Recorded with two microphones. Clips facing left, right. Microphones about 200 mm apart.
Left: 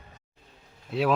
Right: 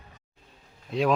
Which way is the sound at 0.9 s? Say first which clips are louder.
Right 1 dB; 5° left (ahead or behind).